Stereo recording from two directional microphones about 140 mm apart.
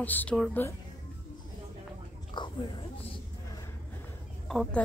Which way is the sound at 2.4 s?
35° left (ahead or behind).